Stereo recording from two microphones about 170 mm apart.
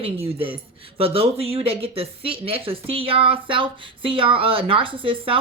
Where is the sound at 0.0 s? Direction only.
35° right (ahead or behind).